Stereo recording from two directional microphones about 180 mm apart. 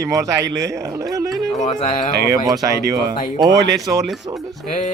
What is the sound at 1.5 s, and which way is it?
Speech, 40° left (ahead or behind).